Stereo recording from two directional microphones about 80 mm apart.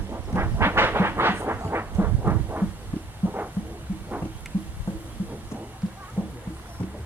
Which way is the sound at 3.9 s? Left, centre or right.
Centre.